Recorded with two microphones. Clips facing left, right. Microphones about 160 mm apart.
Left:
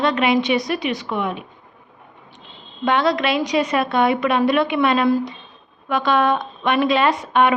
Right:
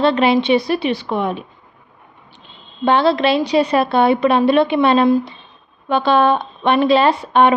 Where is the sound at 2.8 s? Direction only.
30° right (ahead or behind).